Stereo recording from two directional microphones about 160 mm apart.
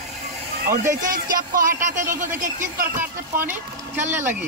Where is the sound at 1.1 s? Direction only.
55° right (ahead or behind).